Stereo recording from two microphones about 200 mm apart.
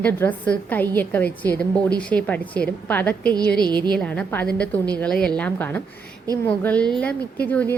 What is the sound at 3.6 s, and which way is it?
Speech, 20° right (ahead or behind).